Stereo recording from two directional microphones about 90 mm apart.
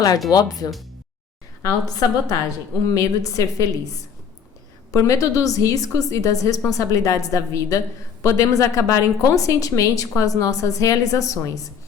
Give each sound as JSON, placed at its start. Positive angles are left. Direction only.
{"t": 0.3, "sound": "a woman's voice", "side_deg": 45}
{"t": 1.6, "sound": "a woman's voice", "side_deg": 40}